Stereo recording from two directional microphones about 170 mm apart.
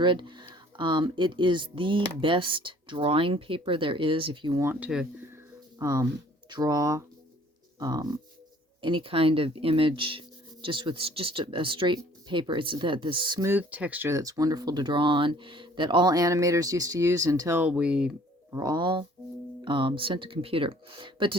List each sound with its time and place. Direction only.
0.0 s speech: 25° right (ahead or behind)
4.6 s speech: 10° right (ahead or behind)
5.8 s speech: 20° right (ahead or behind)
13.5 s speech: 10° right (ahead or behind)
18.5 s speech: 25° right (ahead or behind)